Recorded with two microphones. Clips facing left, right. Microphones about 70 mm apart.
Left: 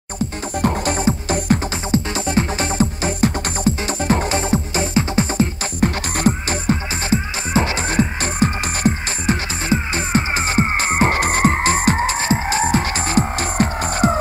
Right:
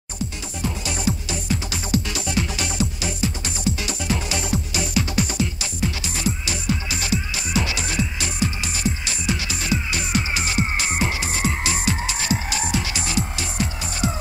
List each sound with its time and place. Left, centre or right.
0.6 s music: left
5.8 s music: left